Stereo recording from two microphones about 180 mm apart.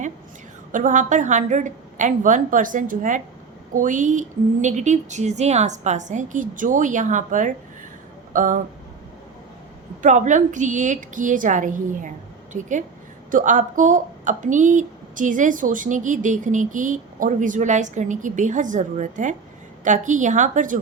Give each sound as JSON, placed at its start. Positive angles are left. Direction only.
{"t": 0.7, "sound": "speech", "side_deg": -45}
{"t": 10.0, "sound": "speech", "side_deg": -45}